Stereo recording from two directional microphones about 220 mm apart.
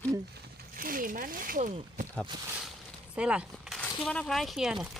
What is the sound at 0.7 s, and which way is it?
Speech, 40° right (ahead or behind).